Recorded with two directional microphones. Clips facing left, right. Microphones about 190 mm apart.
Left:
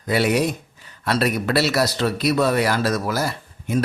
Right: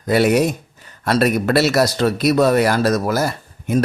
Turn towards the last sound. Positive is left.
turn(degrees=-50)  # may be behind; listen again after turning